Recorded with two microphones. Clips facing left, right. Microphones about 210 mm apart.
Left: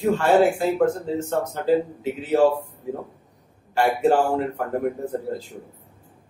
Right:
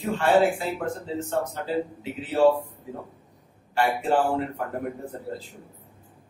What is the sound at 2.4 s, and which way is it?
Speech, 45° left (ahead or behind).